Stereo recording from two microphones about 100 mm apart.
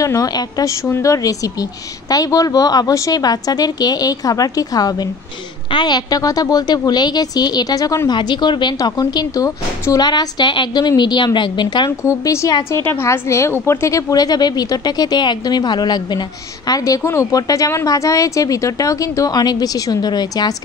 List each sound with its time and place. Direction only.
0.0 s a woman's voice: 35° left (ahead or behind)
0.8 s a woman's voice: 30° left (ahead or behind)
8.1 s a woman's voice: 50° left (ahead or behind)
12.0 s a woman's voice: 30° left (ahead or behind)